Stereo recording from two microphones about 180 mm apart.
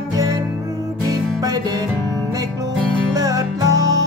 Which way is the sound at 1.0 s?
20° right (ahead or behind).